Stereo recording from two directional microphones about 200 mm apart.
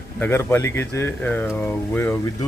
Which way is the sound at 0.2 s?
10° left (ahead or behind).